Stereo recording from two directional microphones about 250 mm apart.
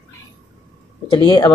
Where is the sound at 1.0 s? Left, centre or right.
Centre.